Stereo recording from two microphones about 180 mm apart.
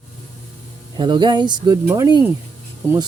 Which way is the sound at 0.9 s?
25° right (ahead or behind).